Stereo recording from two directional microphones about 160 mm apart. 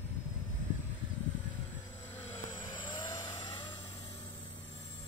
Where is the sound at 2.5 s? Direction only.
30° left (ahead or behind).